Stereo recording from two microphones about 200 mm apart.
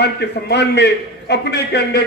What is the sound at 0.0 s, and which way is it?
A man's voice, 55° left (ahead or behind).